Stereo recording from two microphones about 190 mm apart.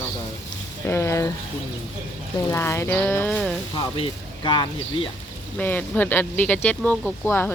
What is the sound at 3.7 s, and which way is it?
Speech, 25° left (ahead or behind).